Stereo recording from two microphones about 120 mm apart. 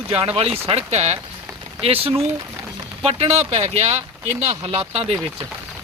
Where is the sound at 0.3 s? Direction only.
55° right (ahead or behind).